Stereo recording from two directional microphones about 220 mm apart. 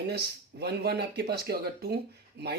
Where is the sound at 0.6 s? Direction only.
45° right (ahead or behind).